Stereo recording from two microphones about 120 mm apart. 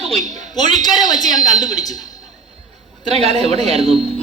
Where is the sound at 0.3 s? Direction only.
35° left (ahead or behind).